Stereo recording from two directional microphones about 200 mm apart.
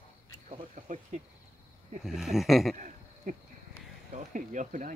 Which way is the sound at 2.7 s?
40° right (ahead or behind).